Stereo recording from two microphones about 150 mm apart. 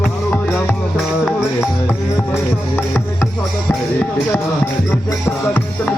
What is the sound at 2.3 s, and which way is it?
Music, 15° left (ahead or behind).